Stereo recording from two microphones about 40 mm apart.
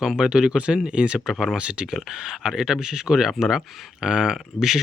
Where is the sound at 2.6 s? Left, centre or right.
Centre.